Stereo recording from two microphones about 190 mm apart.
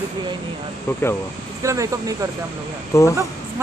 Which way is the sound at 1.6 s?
15° right (ahead or behind).